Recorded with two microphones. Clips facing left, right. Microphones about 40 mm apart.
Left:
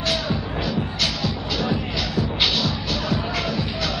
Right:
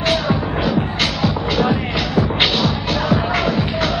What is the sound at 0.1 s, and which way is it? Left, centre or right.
Music, right.